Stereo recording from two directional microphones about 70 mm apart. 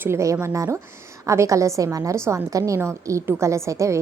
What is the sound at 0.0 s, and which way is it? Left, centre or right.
A woman's voice, right.